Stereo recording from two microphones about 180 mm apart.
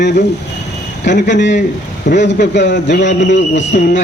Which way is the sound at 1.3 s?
80° left.